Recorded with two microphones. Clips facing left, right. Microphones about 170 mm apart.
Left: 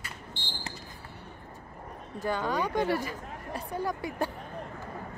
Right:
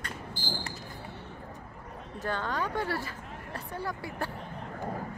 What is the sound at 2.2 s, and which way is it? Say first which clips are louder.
Speech: left 3 dB; 10° left (ahead or behind).